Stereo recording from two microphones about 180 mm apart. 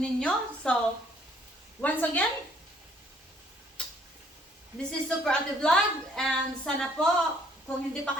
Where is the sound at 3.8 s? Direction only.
5° left (ahead or behind).